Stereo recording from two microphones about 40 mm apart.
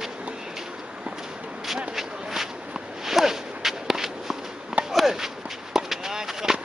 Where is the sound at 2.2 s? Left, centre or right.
Centre.